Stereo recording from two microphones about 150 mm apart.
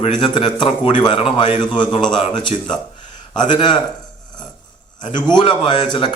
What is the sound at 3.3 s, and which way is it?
Speech, 30° left (ahead or behind).